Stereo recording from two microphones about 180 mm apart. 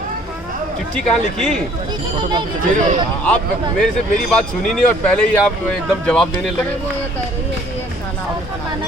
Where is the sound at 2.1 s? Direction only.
25° right (ahead or behind).